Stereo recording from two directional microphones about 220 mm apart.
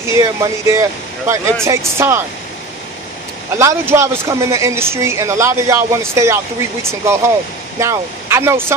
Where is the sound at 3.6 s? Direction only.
15° right (ahead or behind).